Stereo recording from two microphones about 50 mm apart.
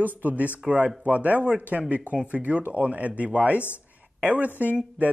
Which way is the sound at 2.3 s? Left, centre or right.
Right.